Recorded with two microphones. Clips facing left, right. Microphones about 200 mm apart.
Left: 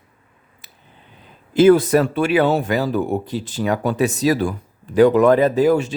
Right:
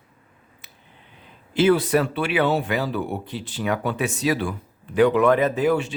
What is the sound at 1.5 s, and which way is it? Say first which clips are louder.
Speech: left 6 dB; 45° left (ahead or behind).